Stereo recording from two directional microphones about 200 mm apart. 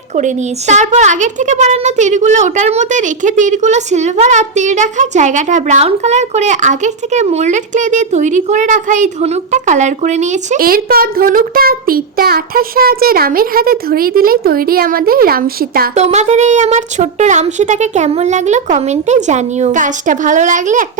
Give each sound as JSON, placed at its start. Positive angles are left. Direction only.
{"t": 0.2, "sound": "a woman's voice", "side_deg": -35}
{"t": 16.0, "sound": "a woman's voice", "side_deg": -35}